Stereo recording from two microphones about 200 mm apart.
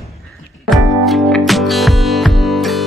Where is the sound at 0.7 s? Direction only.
Centre (ahead or behind).